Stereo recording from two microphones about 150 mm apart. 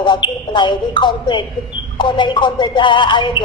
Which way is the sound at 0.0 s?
30° left (ahead or behind).